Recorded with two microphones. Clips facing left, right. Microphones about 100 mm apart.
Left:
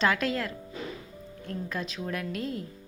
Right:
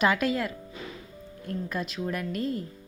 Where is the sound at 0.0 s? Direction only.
5° right (ahead or behind).